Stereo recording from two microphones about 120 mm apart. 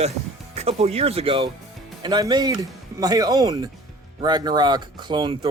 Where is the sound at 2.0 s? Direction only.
35° right (ahead or behind).